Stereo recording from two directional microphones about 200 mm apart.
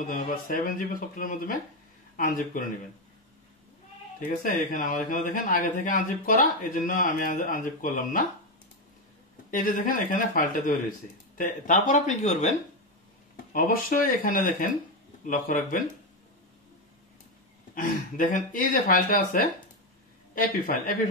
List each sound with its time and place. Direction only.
0.0 s speech: 45° left (ahead or behind)
4.2 s speech: 45° left (ahead or behind)
9.5 s speech: 40° left (ahead or behind)
17.7 s speech: 45° left (ahead or behind)